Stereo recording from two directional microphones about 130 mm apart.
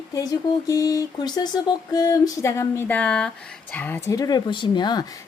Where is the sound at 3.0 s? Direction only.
10° left (ahead or behind).